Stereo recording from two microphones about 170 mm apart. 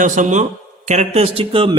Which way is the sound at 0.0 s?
45° right (ahead or behind).